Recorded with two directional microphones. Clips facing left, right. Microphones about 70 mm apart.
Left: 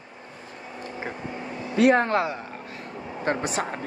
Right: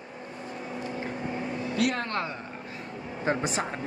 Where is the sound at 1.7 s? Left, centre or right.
Left.